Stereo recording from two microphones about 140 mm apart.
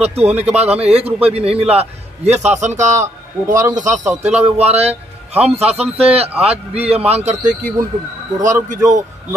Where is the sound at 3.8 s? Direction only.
65° right (ahead or behind).